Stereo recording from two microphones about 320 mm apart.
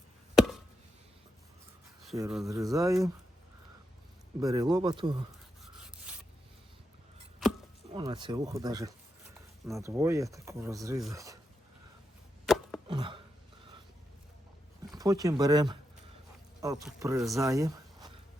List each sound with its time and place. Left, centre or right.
0.3 s chop: centre
2.0 s speech: centre
4.4 s speech: centre
7.9 s speech: centre
12.5 s chopping: centre
12.9 s a sound: centre
14.9 s speech: centre